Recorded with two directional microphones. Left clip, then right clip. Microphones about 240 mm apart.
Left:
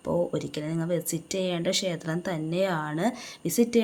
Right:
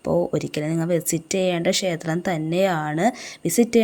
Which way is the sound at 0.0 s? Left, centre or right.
Right.